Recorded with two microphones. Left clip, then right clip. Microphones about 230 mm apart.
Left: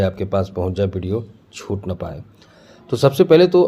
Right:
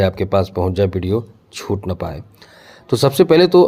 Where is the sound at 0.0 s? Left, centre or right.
Right.